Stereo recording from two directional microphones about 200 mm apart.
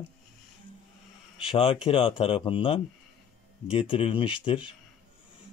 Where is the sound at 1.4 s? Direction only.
25° left (ahead or behind).